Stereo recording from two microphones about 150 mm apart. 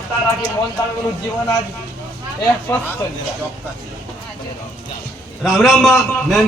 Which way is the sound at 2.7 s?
20° left (ahead or behind).